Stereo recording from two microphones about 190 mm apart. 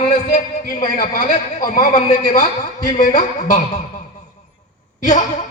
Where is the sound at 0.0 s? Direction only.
40° left (ahead or behind).